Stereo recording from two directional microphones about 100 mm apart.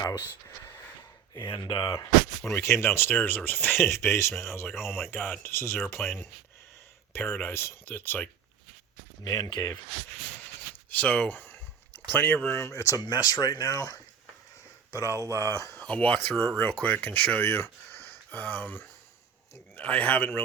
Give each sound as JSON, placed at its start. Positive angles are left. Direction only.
{"t": 1.5, "sound": "speech", "side_deg": 55}
{"t": 2.5, "sound": "speech", "side_deg": 25}
{"t": 4.7, "sound": "speech", "side_deg": -5}
{"t": 5.1, "sound": "speech", "side_deg": 15}
{"t": 9.2, "sound": "speech", "side_deg": 35}
{"t": 10.8, "sound": "speech", "side_deg": 15}
{"t": 15.8, "sound": "speech", "side_deg": 15}